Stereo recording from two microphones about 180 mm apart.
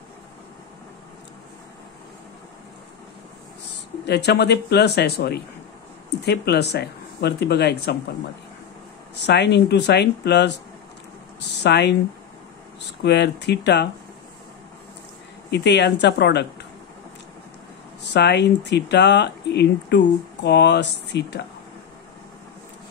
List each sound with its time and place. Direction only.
4.0 s speech: 65° left (ahead or behind)
9.1 s speech: 70° left (ahead or behind)
11.6 s speech: 70° left (ahead or behind)
13.0 s speech: 70° left (ahead or behind)
15.5 s speech: 70° left (ahead or behind)
18.1 s speech: 70° left (ahead or behind)